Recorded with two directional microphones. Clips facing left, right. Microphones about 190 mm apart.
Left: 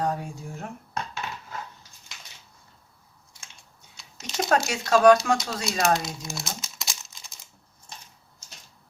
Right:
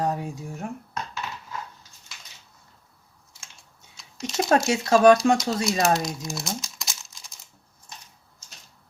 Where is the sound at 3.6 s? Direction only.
Centre (ahead or behind).